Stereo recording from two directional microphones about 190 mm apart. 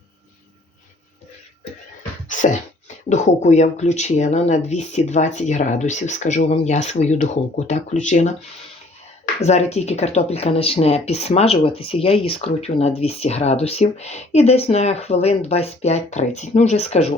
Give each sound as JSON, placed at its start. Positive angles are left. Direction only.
{"t": 2.3, "sound": "a sound", "side_deg": 40}
{"t": 3.1, "sound": "speech", "side_deg": 40}
{"t": 9.4, "sound": "speech", "side_deg": 35}